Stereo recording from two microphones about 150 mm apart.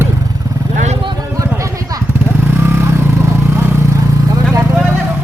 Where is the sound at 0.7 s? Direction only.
50° right (ahead or behind).